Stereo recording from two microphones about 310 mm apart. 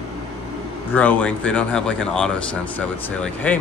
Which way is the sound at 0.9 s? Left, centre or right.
Centre.